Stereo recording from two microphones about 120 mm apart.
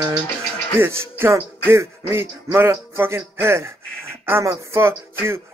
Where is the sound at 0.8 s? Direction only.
20° right (ahead or behind).